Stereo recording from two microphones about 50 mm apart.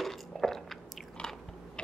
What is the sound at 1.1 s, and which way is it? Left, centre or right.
Biting, centre.